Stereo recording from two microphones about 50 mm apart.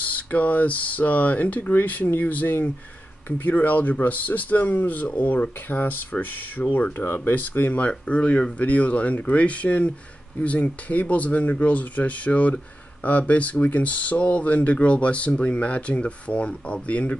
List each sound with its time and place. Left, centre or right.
0.0 s speech: left